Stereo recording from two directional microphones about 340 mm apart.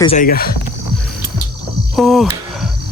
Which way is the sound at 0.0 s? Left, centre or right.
Centre.